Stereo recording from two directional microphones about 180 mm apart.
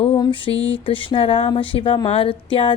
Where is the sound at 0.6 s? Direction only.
30° left (ahead or behind).